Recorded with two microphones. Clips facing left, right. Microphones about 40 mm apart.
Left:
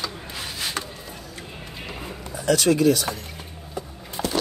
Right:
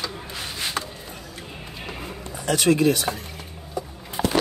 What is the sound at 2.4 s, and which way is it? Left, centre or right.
Speech, right.